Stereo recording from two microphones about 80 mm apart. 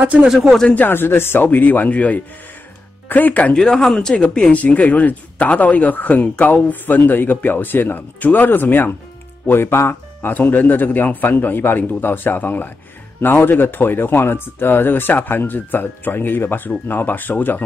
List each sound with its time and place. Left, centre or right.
0.0 s speech: centre
0.6 s speech: centre
3.5 s speech: centre